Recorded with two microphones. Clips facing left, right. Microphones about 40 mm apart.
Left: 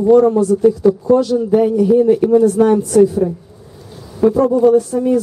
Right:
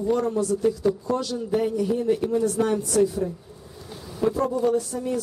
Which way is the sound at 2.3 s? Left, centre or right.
Left.